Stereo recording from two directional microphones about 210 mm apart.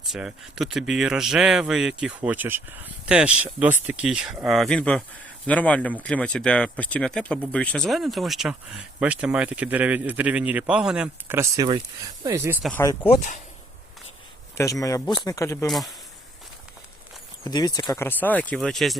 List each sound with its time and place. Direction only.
0.0 s speech: centre (ahead or behind)
12.8 s speech: 15° left (ahead or behind)
13.1 s speech: 35° left (ahead or behind)
14.5 s speech: 15° left (ahead or behind)
15.6 s speech: centre (ahead or behind)
17.4 s speech: 20° left (ahead or behind); by 18.9 s centre (ahead or behind)